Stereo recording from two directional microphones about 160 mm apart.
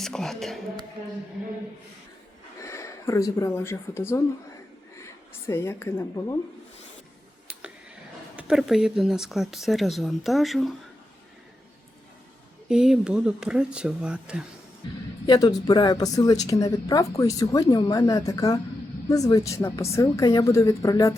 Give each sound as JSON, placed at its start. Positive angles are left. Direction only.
{"t": 0.0, "sound": "a woman's voice", "side_deg": 0}
{"t": 2.6, "sound": "a woman's voice", "side_deg": 20}
{"t": 8.4, "sound": "speech", "side_deg": -5}
{"t": 12.6, "sound": "speech", "side_deg": -5}
{"t": 15.3, "sound": "speech", "side_deg": 25}